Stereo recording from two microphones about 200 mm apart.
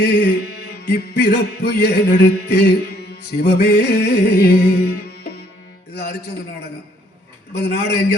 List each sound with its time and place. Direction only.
0.0 s music: 55° left (ahead or behind)
7.5 s music: 55° left (ahead or behind)